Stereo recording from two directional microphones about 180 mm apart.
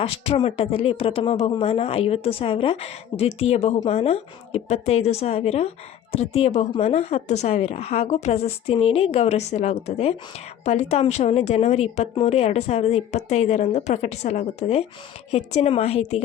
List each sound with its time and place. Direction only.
0.0 s speech: 30° left (ahead or behind)